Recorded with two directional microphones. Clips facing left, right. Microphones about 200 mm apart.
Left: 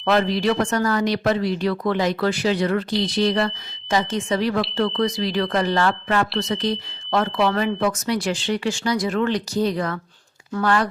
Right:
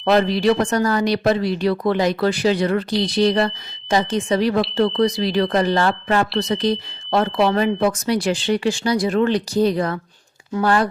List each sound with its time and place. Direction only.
0.0 s speech: 35° right (ahead or behind)